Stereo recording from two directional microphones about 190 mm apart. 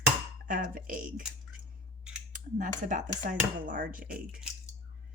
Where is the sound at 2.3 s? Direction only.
40° right (ahead or behind).